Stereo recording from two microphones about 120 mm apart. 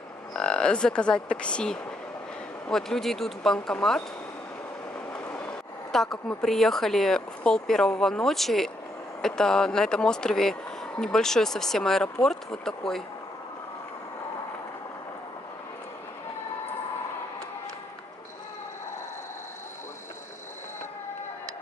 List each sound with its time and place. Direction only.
0.3 s speech: 10° left (ahead or behind)
5.1 s train: 20° left (ahead or behind)
5.9 s speech: 5° left (ahead or behind)